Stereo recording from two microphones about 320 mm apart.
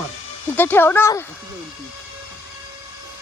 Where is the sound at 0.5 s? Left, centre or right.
Centre.